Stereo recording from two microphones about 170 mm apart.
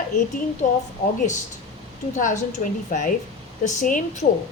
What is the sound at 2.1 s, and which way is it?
A woman's voice, 45° left (ahead or behind).